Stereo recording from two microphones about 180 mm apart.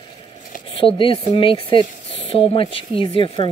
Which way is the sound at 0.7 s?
30° left (ahead or behind).